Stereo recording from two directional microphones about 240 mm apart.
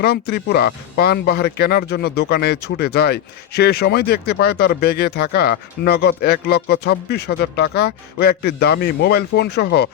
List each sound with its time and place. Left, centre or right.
0.0 s speech: left